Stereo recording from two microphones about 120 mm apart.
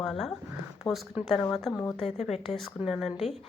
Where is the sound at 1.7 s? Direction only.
30° left (ahead or behind).